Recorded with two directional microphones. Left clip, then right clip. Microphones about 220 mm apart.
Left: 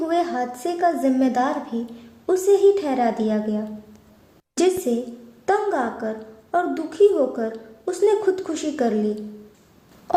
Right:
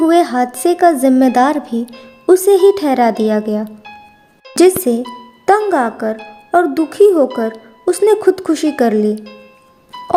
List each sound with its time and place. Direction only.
0.0 s speech: 40° right (ahead or behind)